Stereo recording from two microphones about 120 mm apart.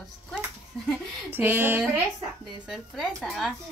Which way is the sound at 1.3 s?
15° right (ahead or behind).